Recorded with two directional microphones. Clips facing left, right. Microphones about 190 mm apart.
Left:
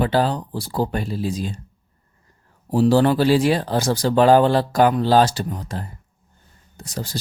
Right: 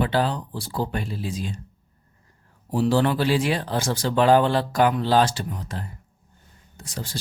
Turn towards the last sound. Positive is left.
turn(degrees=40)  # may be behind; listen again after turning